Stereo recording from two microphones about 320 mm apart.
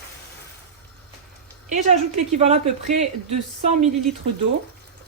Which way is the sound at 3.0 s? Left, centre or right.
Right.